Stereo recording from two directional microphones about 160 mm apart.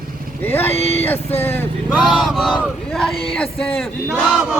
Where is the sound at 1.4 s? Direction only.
15° left (ahead or behind).